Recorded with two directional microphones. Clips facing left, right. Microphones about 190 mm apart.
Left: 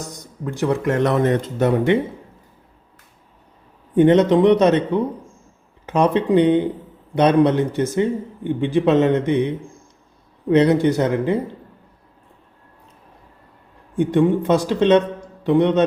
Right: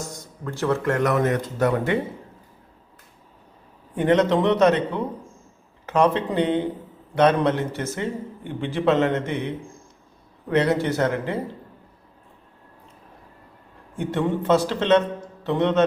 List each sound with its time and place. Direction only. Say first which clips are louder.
0.0 s speech: left 3 dB; 15° left (ahead or behind)
3.9 s a man's voice: left 6 dB; 20° left (ahead or behind)
10.5 s a man's voice: left 6 dB; 20° left (ahead or behind)
13.9 s a man's voice: left 7 dB; 15° left (ahead or behind)